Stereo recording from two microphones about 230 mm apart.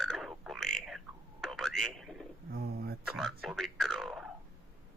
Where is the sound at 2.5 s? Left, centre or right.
Right.